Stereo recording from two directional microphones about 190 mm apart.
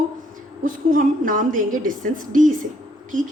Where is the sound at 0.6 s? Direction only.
45° right (ahead or behind).